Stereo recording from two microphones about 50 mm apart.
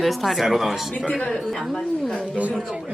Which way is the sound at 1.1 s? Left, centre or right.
Centre.